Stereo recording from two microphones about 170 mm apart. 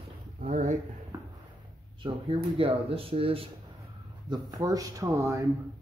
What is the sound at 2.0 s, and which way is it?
Speech, 30° right (ahead or behind).